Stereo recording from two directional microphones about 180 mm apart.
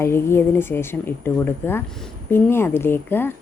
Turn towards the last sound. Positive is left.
turn(degrees=10)  # may be behind; listen again after turning